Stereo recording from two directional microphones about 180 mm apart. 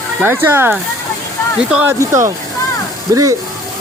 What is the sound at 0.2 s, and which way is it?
Speech, 10° right (ahead or behind).